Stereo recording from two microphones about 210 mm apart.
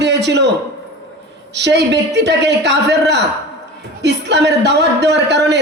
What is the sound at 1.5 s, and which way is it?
A man's voice, 55° right (ahead or behind).